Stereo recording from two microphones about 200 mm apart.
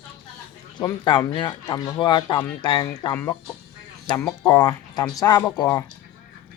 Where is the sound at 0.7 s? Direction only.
20° left (ahead or behind).